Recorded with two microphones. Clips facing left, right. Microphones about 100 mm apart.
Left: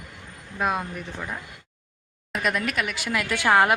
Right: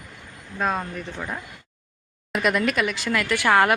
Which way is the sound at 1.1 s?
5° right (ahead or behind).